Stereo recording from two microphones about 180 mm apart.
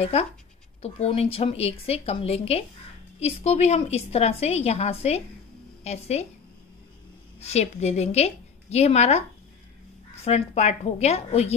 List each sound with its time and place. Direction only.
0.0 s a woman's voice: 35° left (ahead or behind)
7.3 s a woman's voice: 35° left (ahead or behind)
10.2 s a woman's voice: 35° left (ahead or behind)